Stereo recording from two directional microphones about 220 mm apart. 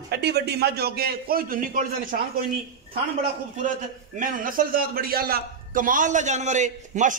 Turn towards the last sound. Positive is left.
turn(degrees=-35)  # may be behind; listen again after turning